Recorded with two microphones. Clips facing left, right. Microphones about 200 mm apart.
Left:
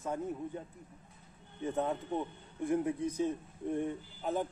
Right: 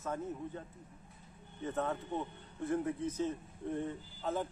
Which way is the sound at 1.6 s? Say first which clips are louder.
Left 3 dB; 15° left (ahead or behind).